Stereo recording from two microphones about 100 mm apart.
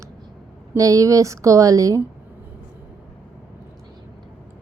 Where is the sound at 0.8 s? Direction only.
35° right (ahead or behind).